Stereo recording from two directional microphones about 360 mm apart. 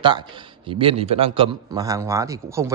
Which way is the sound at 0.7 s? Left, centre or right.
Centre.